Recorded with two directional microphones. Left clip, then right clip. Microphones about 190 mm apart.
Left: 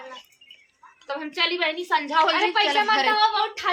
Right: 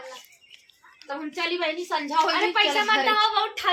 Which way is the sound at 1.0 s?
5° right (ahead or behind).